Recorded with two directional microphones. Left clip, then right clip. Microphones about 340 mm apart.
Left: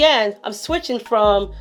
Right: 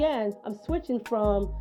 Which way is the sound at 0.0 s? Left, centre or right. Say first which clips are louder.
Left 12 dB; centre.